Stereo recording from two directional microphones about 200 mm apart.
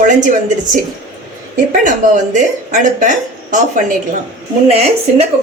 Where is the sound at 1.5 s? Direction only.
40° right (ahead or behind).